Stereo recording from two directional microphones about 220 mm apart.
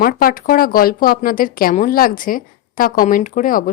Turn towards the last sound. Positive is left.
turn(degrees=40)  # may be behind; listen again after turning